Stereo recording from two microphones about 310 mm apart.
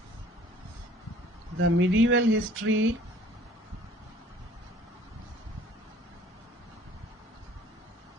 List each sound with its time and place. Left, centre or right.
1.5 s speech: right